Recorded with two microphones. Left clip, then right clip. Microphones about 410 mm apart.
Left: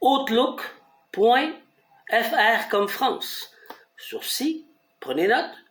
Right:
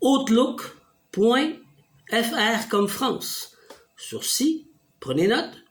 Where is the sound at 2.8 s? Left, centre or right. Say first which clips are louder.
Left 2 dB; right.